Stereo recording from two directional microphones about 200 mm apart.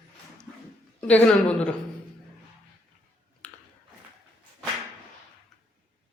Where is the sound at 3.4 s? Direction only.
5° left (ahead or behind).